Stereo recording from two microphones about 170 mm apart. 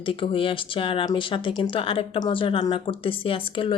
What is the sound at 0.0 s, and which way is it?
Speech, 30° left (ahead or behind).